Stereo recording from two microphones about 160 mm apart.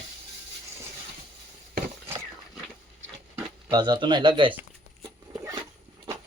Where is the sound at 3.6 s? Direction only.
30° right (ahead or behind).